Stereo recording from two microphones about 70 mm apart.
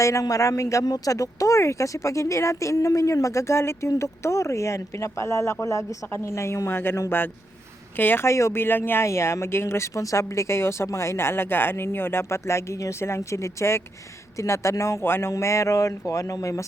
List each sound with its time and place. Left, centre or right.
0.0 s speech: left
15.3 s speech: left